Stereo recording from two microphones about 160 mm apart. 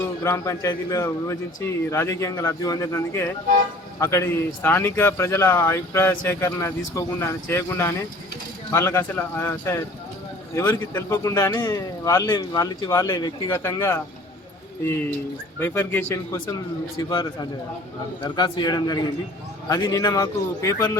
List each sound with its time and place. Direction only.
0.2 s speech: 20° left (ahead or behind)
15.5 s speech: 15° left (ahead or behind)
17.0 s speech: 30° left (ahead or behind)